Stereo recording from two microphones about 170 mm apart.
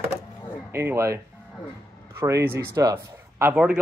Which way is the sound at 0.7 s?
15° right (ahead or behind).